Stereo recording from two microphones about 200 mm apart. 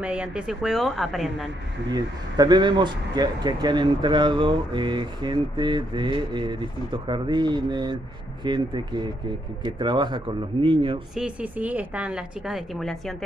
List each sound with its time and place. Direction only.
0.0 s a woman's voice: 5° right (ahead or behind)
1.9 s speech: 20° right (ahead or behind)
11.1 s a woman's voice: 5° right (ahead or behind)